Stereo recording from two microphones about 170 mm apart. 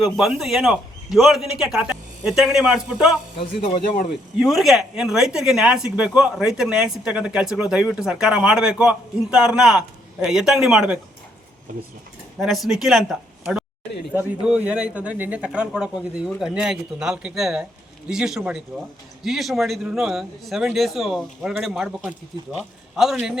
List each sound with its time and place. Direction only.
0.0 s speech: centre (ahead or behind)
3.8 s speech: 55° left (ahead or behind)
4.4 s speech: centre (ahead or behind)
12.4 s speech: centre (ahead or behind)